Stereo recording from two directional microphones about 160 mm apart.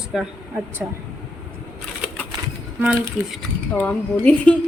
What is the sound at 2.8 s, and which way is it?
Speech, 5° right (ahead or behind).